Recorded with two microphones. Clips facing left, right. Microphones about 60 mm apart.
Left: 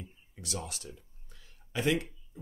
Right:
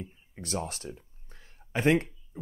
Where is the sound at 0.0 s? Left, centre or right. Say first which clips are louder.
Right 5 dB; right.